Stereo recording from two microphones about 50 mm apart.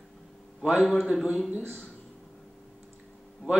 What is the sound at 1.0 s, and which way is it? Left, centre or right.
Speech, centre.